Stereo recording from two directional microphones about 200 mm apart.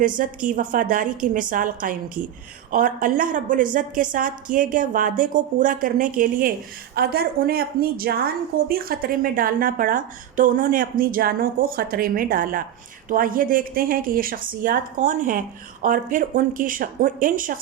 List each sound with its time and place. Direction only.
0.0 s a woman's voice: 40° right (ahead or behind)